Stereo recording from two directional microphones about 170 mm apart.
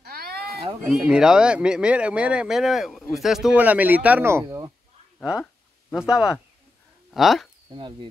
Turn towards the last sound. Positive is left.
turn(degrees=0)  # may be behind; listen again after turning